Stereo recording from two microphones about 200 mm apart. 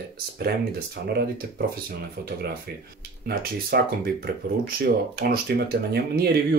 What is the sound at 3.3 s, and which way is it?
Speech, 50° right (ahead or behind).